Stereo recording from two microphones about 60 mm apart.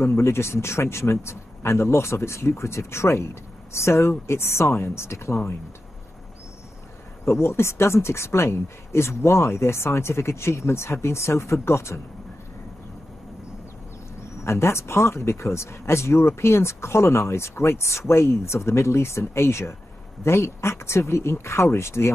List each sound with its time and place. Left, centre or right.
0.0 s speech: left
7.2 s speech: left
14.4 s speech: left